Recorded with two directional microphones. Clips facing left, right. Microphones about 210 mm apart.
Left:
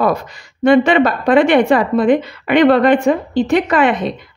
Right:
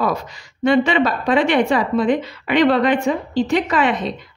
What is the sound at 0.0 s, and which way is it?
A woman's voice, 55° left (ahead or behind).